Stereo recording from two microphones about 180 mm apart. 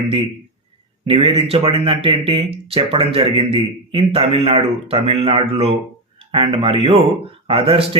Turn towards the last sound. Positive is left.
turn(degrees=-30)  # may be behind; listen again after turning